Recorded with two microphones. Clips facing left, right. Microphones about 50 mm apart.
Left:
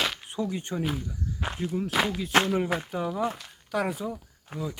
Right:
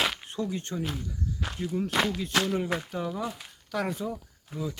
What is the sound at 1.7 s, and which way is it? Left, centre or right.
Speech, centre.